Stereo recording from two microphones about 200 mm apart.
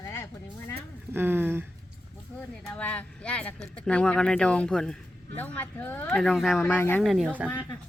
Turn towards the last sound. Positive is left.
turn(degrees=5)  # may be behind; listen again after turning